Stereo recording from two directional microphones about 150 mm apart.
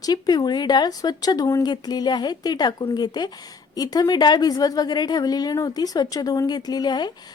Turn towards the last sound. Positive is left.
turn(degrees=30)  # may be behind; listen again after turning